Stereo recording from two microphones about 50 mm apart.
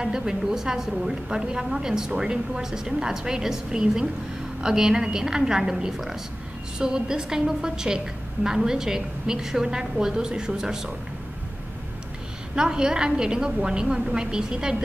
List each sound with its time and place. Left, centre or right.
0.0 s a woman's voice: centre
12.5 s a woman's voice: centre